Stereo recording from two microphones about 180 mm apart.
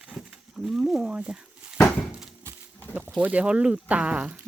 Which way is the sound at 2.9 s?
10° right (ahead or behind).